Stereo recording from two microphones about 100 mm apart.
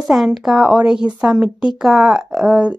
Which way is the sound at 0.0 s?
Centre (ahead or behind).